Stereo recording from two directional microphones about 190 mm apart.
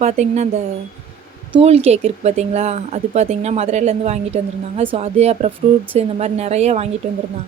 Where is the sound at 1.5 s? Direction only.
30° right (ahead or behind).